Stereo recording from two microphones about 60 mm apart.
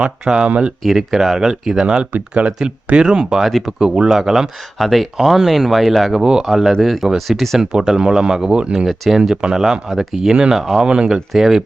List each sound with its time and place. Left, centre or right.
0.0 s speech: centre
0.8 s speech: centre
7.6 s speech: centre
8.9 s speech: centre
10.8 s speech: centre